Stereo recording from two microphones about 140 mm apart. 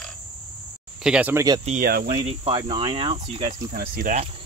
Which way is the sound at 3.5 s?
85° right.